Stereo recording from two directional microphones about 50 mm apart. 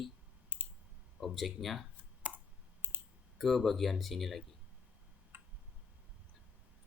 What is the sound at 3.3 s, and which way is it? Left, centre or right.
Speech, centre.